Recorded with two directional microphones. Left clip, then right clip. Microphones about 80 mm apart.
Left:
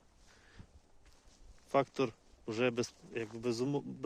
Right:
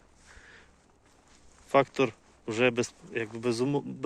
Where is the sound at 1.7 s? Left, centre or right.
Left.